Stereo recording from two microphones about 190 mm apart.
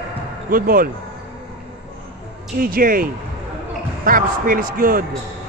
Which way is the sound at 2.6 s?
50° right (ahead or behind).